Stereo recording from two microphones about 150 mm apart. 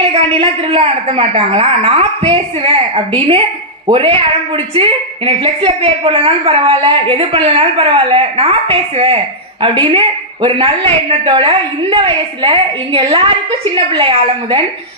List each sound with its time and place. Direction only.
0.1 s a woman's voice: 35° right (ahead or behind)